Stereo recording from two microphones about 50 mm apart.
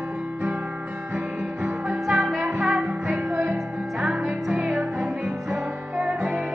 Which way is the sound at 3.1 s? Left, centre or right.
Right.